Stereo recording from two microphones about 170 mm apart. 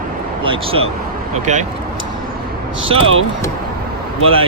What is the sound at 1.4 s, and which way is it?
Speech, 45° right (ahead or behind).